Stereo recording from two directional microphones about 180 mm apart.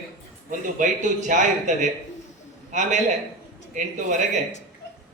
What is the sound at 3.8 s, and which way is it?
Speech, 45° right (ahead or behind).